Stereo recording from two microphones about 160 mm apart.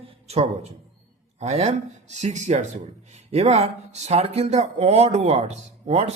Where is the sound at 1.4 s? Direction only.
40° right (ahead or behind).